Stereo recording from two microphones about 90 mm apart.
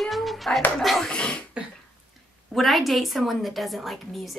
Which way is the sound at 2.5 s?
Centre (ahead or behind).